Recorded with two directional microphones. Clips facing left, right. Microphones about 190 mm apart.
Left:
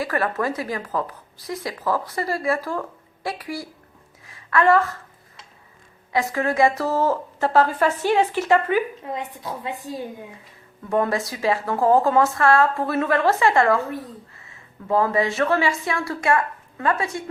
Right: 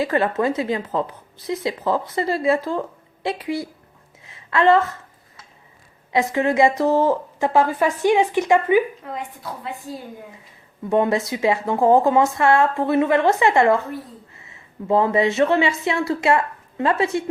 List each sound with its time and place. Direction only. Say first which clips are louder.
0.0 s speech: right 4 dB; 25° right (ahead or behind)
4.3 s a sound: right 2 dB; 25° right (ahead or behind)
6.1 s a woman's voice: right 3 dB; 20° right (ahead or behind)
9.0 s a woman's voice: left 1 dB; 20° left (ahead or behind)
10.8 s speech: right 3 dB; 20° right (ahead or behind)
14.8 s speech: right 3 dB; 20° right (ahead or behind)